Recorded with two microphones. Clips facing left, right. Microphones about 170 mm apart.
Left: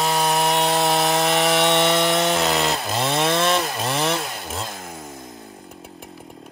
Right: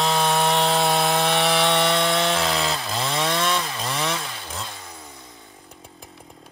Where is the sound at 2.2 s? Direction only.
20° left (ahead or behind).